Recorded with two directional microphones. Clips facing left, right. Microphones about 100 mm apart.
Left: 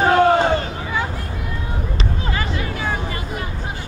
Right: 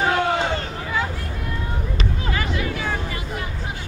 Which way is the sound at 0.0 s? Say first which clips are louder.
Left 6 dB; 40° left (ahead or behind).